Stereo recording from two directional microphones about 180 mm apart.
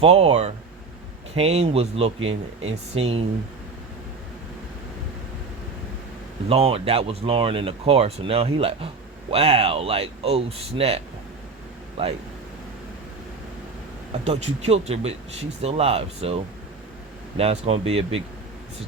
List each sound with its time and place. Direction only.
0.0 s speech: 35° right (ahead or behind)
6.5 s speech: 30° right (ahead or behind)
14.1 s speech: 35° right (ahead or behind)